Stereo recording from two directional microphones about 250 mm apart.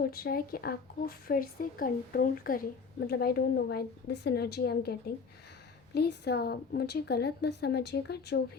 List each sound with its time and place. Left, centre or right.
0.0 s a woman's voice: left